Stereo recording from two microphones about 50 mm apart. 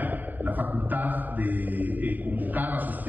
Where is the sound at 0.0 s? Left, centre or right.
Right.